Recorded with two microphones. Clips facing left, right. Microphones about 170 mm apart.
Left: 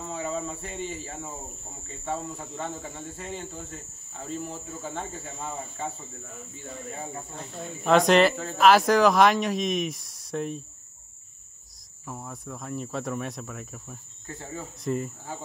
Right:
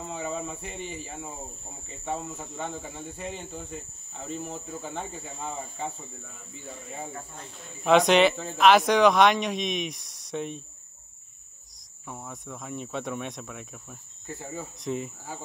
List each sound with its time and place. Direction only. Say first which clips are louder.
0.1 s speech: left 2 dB; 15° right (ahead or behind)
4.9 s speech: left 1 dB; 15° right (ahead or behind)
7.8 s speech: even; centre (ahead or behind)
12.1 s speech: left 1 dB; centre (ahead or behind)
14.4 s speech: left 2 dB; 10° right (ahead or behind)